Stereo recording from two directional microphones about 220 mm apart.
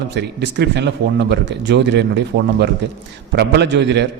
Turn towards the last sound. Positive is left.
turn(degrees=-50)  # may be behind; listen again after turning